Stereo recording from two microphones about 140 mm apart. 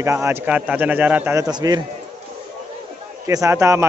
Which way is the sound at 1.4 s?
30° right (ahead or behind).